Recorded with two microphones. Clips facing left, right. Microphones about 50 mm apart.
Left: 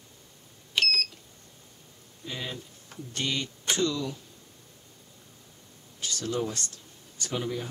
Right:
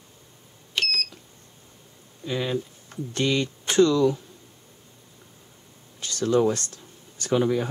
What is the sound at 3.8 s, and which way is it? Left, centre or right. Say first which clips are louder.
Speech: right 12 dB; right.